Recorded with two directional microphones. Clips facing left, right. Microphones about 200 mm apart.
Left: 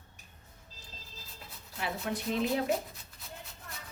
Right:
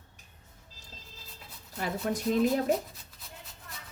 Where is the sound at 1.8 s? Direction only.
40° right (ahead or behind).